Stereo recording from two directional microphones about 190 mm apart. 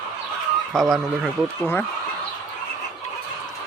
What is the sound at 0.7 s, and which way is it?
Speech, centre (ahead or behind).